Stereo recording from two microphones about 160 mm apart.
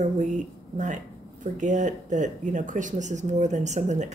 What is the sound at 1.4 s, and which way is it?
Speech, 50° right (ahead or behind).